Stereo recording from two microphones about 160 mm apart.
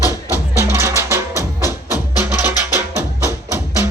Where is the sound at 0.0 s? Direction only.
20° left (ahead or behind).